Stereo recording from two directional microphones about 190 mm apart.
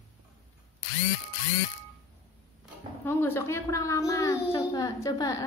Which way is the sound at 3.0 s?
15° left (ahead or behind).